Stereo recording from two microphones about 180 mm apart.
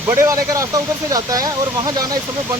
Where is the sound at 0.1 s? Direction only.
15° right (ahead or behind).